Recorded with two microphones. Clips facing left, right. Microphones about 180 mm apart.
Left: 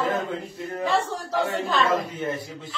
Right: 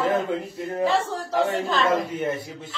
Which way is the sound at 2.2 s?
25° right (ahead or behind).